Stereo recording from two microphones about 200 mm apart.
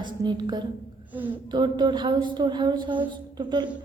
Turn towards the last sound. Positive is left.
turn(degrees=-20)  # may be behind; listen again after turning